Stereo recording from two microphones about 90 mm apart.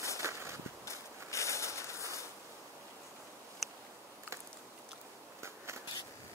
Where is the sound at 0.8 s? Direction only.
35° left (ahead or behind).